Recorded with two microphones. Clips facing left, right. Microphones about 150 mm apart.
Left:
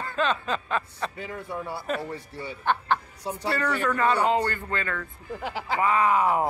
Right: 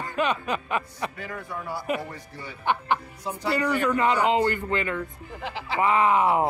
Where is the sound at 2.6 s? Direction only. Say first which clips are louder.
Even; 15° right (ahead or behind).